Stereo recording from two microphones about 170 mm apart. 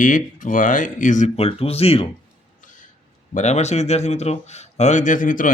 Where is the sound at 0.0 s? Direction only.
50° left (ahead or behind).